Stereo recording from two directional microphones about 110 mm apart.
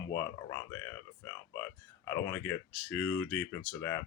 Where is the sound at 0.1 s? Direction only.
25° left (ahead or behind).